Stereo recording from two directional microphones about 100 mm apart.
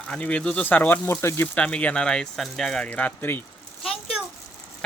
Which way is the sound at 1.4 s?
10° left (ahead or behind).